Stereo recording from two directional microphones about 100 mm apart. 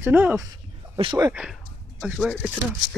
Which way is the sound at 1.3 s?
5° right (ahead or behind).